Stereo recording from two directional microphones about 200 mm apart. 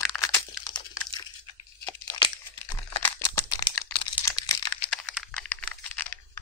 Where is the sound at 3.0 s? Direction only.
10° left (ahead or behind).